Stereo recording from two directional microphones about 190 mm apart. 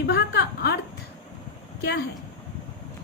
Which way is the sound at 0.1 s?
60° left (ahead or behind).